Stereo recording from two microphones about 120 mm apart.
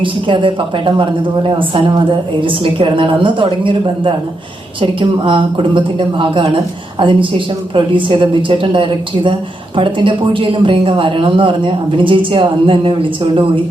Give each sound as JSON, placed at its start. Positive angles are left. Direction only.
{"t": 0.0, "sound": "speech", "side_deg": -45}